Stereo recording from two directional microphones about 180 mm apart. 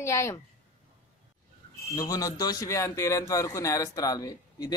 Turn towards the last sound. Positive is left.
turn(degrees=20)  # may be behind; listen again after turning